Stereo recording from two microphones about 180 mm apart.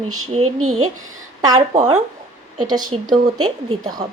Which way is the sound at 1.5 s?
40° right (ahead or behind).